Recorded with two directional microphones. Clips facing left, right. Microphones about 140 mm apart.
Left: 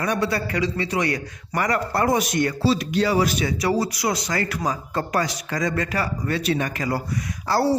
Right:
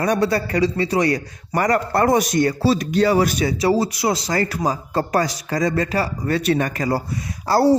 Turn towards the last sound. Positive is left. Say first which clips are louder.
# right 4 dB
turn(degrees=-35)  # may be behind; listen again after turning